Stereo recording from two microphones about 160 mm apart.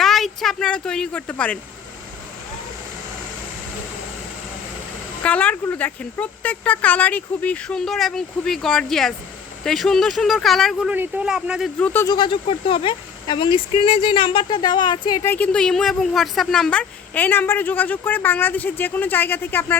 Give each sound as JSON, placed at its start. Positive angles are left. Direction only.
{"t": 0.0, "sound": "speech", "side_deg": 0}
{"t": 5.2, "sound": "speech", "side_deg": 10}
{"t": 12.0, "sound": "speech", "side_deg": 30}
{"t": 15.2, "sound": "speech", "side_deg": 10}